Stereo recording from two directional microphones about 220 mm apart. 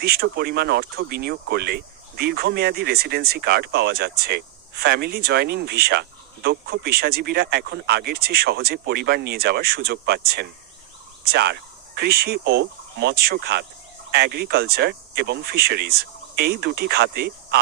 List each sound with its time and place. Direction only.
0.0 s speech: 45° right (ahead or behind)